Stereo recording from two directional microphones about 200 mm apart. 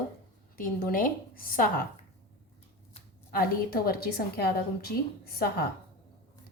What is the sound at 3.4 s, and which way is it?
A woman's voice, 50° left (ahead or behind).